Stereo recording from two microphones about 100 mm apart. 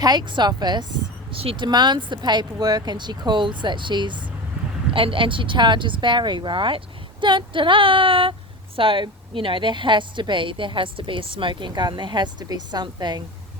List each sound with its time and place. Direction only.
0.0 s speech: 45° right (ahead or behind)
1.3 s speech: 65° right (ahead or behind)
1.6 s speech: 45° right (ahead or behind)